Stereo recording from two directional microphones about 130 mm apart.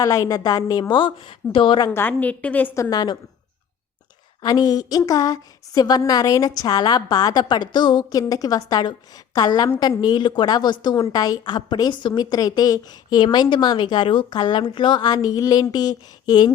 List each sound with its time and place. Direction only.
0.0 s a woman's voice: 25° left (ahead or behind)
1.9 s a woman's voice: 15° left (ahead or behind)
2.9 s a woman's voice: 35° left (ahead or behind)
4.4 s a woman's voice: 30° left (ahead or behind)